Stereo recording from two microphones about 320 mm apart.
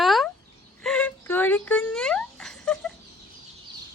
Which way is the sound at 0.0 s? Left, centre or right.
Centre.